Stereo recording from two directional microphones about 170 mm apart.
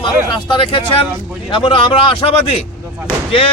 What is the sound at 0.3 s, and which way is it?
Speech, 30° left (ahead or behind).